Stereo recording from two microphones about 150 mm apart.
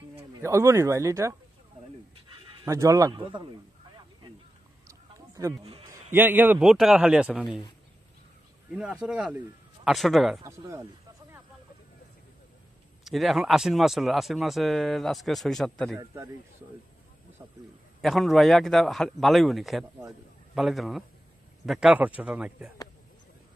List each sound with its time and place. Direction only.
0.4 s speech: 20° right (ahead or behind)
2.6 s speech: 20° right (ahead or behind)
3.2 s a man's voice: 35° right (ahead or behind)
4.8 s fowl: 20° right (ahead or behind)
5.6 s a man's voice: 40° right (ahead or behind)
6.1 s a man's voice: 15° right (ahead or behind)
6.7 s a man's voice: centre (ahead or behind)
8.6 s a man's voice: 5° right (ahead or behind)
10.4 s speech: 20° right (ahead or behind)
13.0 s speech: centre (ahead or behind)
18.0 s a man's voice: centre (ahead or behind)